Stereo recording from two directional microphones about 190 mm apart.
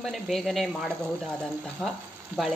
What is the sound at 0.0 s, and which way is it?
Speech, centre (ahead or behind).